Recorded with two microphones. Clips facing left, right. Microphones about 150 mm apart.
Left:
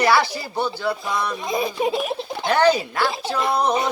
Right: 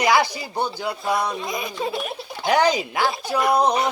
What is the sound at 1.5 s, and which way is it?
Speech, 30° left (ahead or behind).